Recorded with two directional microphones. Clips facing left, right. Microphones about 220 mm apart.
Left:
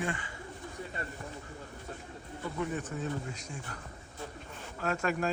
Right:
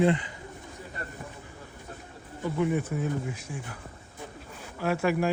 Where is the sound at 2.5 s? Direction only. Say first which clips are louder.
Right 8 dB; 10° right (ahead or behind).